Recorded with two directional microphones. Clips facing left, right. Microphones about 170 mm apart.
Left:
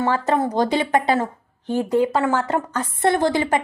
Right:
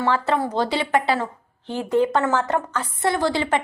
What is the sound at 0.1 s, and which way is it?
Speech, 40° left (ahead or behind).